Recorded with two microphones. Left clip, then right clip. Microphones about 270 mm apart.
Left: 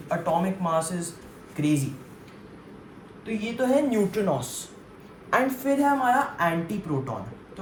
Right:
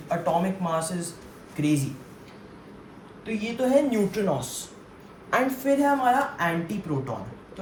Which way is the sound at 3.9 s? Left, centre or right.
Left.